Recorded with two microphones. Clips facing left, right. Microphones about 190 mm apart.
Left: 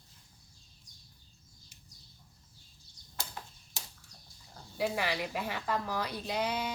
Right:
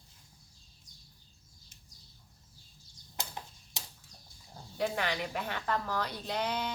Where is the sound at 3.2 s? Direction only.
20° right (ahead or behind).